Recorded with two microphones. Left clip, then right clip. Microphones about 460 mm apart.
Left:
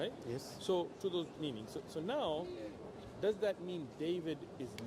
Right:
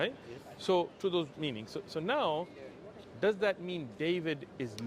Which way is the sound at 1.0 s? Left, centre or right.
Right.